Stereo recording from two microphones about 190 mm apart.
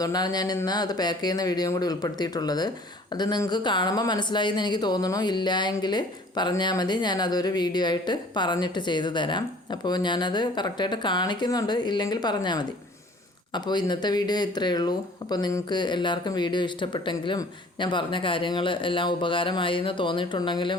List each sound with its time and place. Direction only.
0.0 s speech: 20° left (ahead or behind)